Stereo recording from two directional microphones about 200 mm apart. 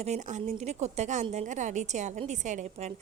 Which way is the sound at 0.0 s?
35° right (ahead or behind).